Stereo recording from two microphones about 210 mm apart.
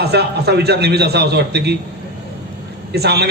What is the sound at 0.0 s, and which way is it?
A man's voice, 50° right (ahead or behind).